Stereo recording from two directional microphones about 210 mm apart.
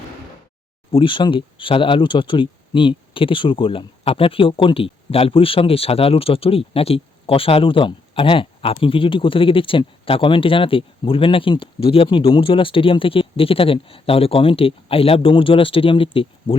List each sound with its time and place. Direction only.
0.9 s speech: 25° left (ahead or behind)